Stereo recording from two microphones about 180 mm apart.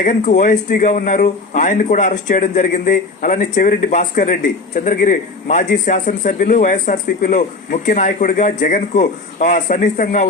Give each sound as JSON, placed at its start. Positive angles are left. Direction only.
{"t": 0.0, "sound": "speech", "side_deg": 45}